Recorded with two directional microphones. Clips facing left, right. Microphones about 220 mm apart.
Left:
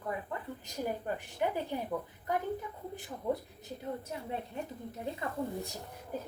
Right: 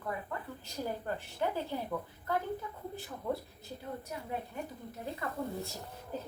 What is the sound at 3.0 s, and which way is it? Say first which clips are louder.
A woman's voice: left 2 dB; 15° left (ahead or behind).